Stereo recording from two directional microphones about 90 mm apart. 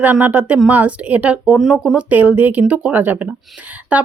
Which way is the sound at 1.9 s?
20° right (ahead or behind).